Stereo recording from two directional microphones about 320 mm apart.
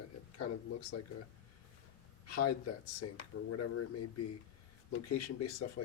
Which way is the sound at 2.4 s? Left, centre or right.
Left.